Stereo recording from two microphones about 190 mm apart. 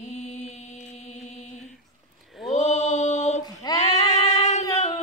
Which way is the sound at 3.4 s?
20° left (ahead or behind).